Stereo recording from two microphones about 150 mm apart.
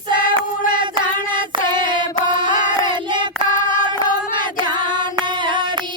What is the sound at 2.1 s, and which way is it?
Singing, 30° right (ahead or behind).